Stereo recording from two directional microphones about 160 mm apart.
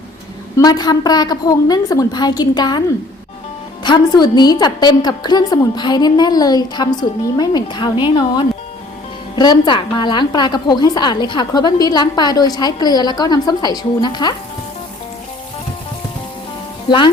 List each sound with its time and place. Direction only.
0.5 s a woman's voice: 25° left (ahead or behind)
3.8 s a woman's voice: 25° left (ahead or behind)
16.9 s speech: 30° left (ahead or behind)